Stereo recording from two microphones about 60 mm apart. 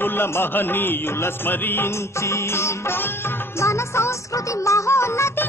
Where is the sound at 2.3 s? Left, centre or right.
Left.